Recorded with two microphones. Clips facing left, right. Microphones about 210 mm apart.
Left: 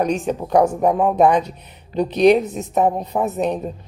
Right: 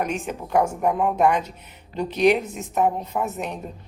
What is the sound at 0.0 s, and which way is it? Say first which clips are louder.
A woman's voice: left 7 dB; 35° left (ahead or behind).